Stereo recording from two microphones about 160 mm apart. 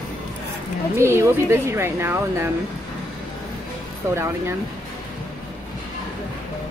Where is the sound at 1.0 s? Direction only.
15° right (ahead or behind).